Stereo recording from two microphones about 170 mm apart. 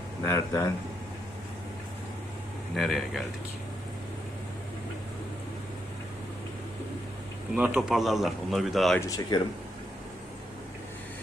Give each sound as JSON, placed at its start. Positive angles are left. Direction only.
{"t": 0.2, "sound": "speech", "side_deg": 15}
{"t": 2.7, "sound": "speech", "side_deg": 0}
{"t": 7.5, "sound": "speech", "side_deg": -10}
{"t": 9.0, "sound": "speech", "side_deg": 20}